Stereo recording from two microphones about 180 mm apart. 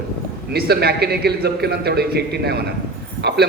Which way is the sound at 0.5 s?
60° right (ahead or behind).